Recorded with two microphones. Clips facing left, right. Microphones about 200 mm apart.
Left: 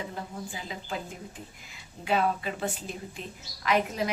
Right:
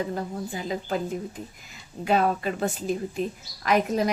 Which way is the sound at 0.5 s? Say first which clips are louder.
Right 10 dB; 40° right (ahead or behind).